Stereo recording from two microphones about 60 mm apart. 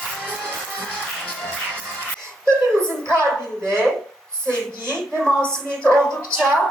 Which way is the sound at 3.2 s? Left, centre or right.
Right.